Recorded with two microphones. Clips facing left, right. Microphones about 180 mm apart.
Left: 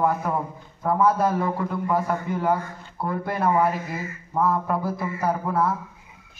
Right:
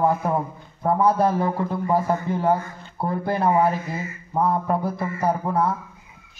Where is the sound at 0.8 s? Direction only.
25° right (ahead or behind).